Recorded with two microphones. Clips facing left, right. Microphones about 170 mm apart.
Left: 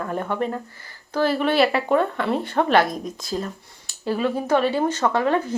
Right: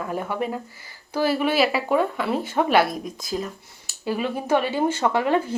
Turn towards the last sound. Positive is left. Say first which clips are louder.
# even
turn(degrees=-10)  # may be behind; listen again after turning